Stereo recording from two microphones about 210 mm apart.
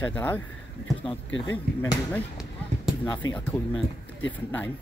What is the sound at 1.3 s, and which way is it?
Speech, 60° left (ahead or behind).